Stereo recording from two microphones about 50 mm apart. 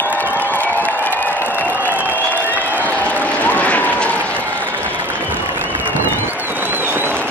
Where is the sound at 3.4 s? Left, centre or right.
Left.